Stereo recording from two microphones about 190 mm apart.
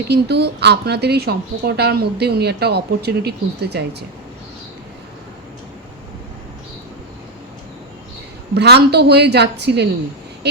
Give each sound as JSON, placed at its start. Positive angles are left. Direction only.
{"t": 0.1, "sound": "a woman's voice", "side_deg": -60}
{"t": 8.5, "sound": "a woman's voice", "side_deg": -60}